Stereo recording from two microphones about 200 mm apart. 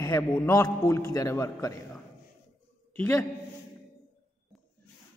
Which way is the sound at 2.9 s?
10° left (ahead or behind).